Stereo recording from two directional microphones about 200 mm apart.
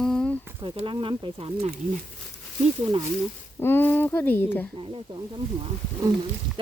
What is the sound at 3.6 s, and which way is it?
Speech, 10° left (ahead or behind).